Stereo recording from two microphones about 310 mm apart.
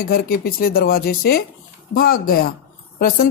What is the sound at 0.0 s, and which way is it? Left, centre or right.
A woman's voice, left.